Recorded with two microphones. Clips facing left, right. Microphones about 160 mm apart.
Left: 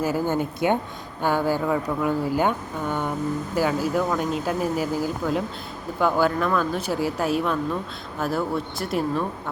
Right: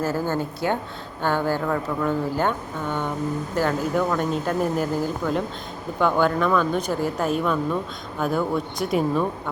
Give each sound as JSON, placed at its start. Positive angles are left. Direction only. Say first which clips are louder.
{"t": 0.0, "sound": "speech", "louder": "left 1 dB", "side_deg": 15}